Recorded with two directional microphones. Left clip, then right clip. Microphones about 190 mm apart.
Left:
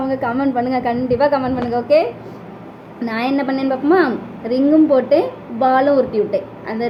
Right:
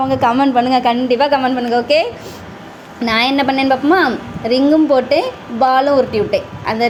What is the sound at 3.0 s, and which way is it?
A woman's voice, 20° right (ahead or behind).